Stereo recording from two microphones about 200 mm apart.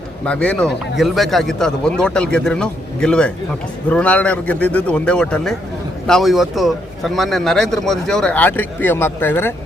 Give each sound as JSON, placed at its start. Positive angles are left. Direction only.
{"t": 0.3, "sound": "a man's voice", "side_deg": 5}